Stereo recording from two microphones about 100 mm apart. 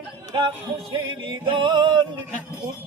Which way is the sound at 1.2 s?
55° right (ahead or behind).